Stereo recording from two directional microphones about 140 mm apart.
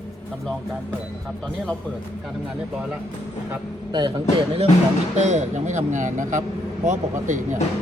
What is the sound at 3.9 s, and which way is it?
Speech, 30° right (ahead or behind).